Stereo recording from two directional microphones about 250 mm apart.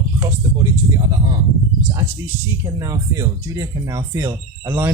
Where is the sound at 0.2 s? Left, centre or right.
Centre.